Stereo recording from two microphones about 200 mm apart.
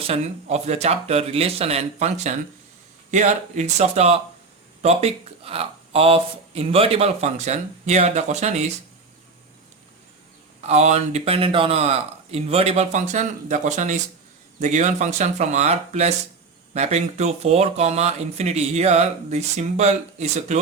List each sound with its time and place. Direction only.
0.1 s speech: 35° right (ahead or behind)
10.7 s speech: 35° right (ahead or behind)